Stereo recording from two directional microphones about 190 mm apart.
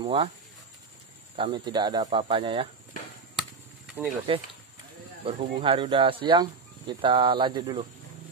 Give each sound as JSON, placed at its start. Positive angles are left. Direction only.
{"t": 0.0, "sound": "speech", "side_deg": -30}
{"t": 1.4, "sound": "speech", "side_deg": -25}
{"t": 3.3, "sound": "chop", "side_deg": -5}
{"t": 5.2, "sound": "speech", "side_deg": -30}